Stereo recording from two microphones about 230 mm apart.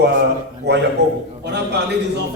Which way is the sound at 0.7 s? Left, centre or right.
Right.